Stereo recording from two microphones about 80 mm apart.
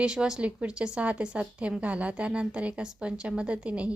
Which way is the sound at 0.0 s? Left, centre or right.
Centre.